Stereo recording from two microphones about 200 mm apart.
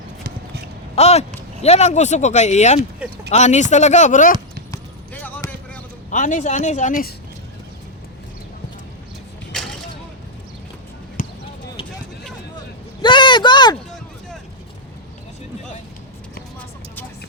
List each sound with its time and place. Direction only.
0.9 s speech: 30° left (ahead or behind)
4.7 s basketball bounce: 10° left (ahead or behind)
6.1 s speech: 40° left (ahead or behind)
9.5 s a sound: centre (ahead or behind)
11.2 s basketball bounce: 40° left (ahead or behind)
13.0 s a sound: 25° left (ahead or behind)
16.6 s vehicle: 10° left (ahead or behind)